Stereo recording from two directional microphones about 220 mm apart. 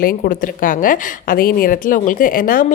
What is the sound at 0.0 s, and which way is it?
A woman's voice, 40° left (ahead or behind).